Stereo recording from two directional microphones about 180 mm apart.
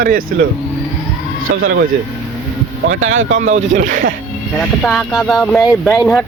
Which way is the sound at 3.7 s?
45° right (ahead or behind).